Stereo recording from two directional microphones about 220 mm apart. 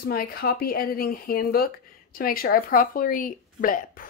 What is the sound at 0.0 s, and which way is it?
Speech, 45° left (ahead or behind).